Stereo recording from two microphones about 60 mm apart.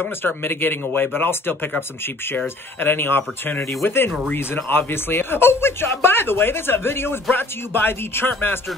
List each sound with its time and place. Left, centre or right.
0.0 s speech: left